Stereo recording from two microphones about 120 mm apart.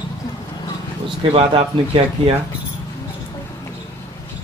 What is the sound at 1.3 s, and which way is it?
Speech, 45° right (ahead or behind).